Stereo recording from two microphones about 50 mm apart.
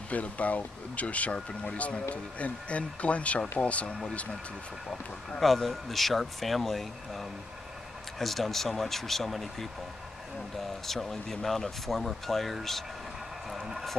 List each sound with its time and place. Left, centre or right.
0.1 s speech: left
5.4 s speech: centre
10.9 s speech: centre